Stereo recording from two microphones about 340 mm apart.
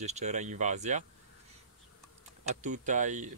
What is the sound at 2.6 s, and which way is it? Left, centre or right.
Speech, right.